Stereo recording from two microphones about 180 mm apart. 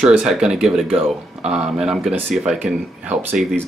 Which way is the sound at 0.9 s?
35° right (ahead or behind).